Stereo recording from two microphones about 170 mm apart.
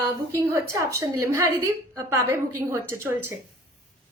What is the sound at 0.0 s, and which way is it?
A woman's voice, 15° right (ahead or behind).